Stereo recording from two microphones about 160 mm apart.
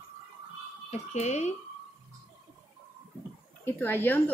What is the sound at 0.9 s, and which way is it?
Speech, 45° left (ahead or behind).